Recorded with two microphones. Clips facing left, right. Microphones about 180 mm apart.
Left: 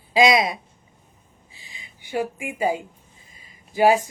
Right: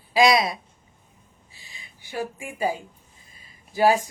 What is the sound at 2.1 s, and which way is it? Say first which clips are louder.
Speech: left 5 dB; 15° left (ahead or behind).